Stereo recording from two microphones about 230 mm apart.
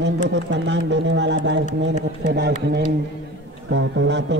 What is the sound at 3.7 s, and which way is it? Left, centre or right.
Speech, right.